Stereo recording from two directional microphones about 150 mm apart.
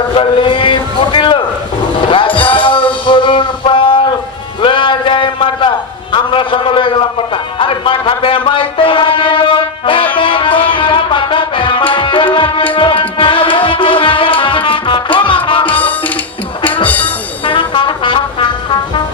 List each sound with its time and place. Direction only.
0.2 s a sound: 35° left (ahead or behind)
2.0 s music: 35° left (ahead or behind)
4.6 s a sound: 35° left (ahead or behind)
7.6 s music: 35° left (ahead or behind)
11.9 s tabla: 35° left (ahead or behind)
12.7 s music: 35° left (ahead or behind)
15.6 s music: 10° left (ahead or behind)
17.4 s brass instrument: 35° left (ahead or behind)